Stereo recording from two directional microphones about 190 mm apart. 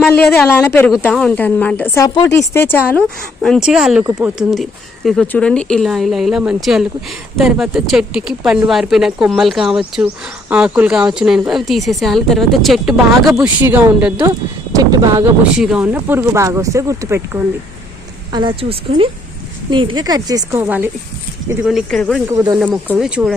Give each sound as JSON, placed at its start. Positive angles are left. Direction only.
{"t": 0.0, "sound": "speech", "side_deg": 5}
{"t": 0.9, "sound": "speech", "side_deg": 0}
{"t": 3.4, "sound": "a woman's voice", "side_deg": 0}
{"t": 4.0, "sound": "speech", "side_deg": -20}
{"t": 4.4, "sound": "a woman's voice", "side_deg": 0}
{"t": 15.5, "sound": "speech", "side_deg": -5}
{"t": 18.3, "sound": "a woman's voice", "side_deg": -25}
{"t": 22.3, "sound": "a woman's voice", "side_deg": -15}